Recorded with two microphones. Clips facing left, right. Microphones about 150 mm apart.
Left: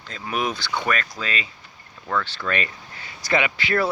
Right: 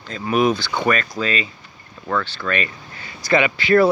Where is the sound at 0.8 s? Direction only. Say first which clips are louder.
Right 8 dB; 5° right (ahead or behind).